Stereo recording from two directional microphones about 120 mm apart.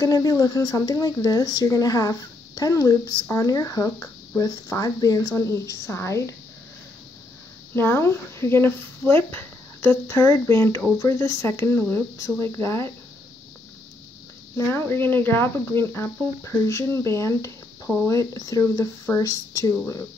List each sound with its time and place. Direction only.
0.0 s speech: 30° left (ahead or behind)
7.7 s speech: 20° left (ahead or behind)
14.7 s speech: 15° left (ahead or behind)